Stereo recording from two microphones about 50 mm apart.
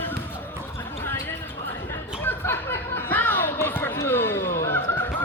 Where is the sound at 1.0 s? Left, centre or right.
Left.